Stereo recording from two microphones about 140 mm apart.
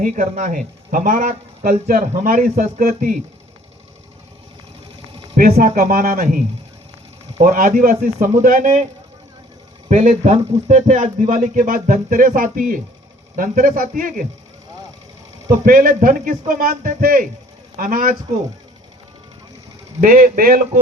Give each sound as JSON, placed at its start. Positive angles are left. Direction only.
{"t": 0.0, "sound": "speech", "side_deg": -65}
{"t": 5.4, "sound": "speech", "side_deg": -90}
{"t": 7.3, "sound": "speech", "side_deg": -70}
{"t": 9.9, "sound": "speech", "side_deg": -60}
{"t": 15.5, "sound": "speech", "side_deg": -75}
{"t": 20.0, "sound": "speech", "side_deg": -75}